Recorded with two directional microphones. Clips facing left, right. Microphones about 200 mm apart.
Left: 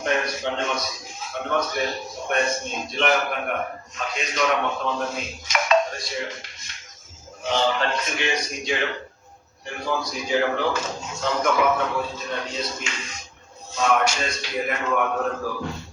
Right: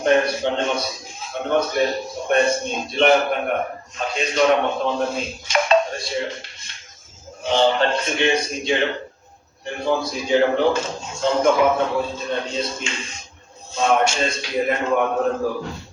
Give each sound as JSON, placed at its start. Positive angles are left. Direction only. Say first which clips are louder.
{"t": 0.0, "sound": "a man's voice", "louder": "right 7 dB", "side_deg": -30}